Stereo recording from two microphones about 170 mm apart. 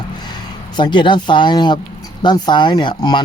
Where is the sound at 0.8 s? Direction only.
25° left (ahead or behind).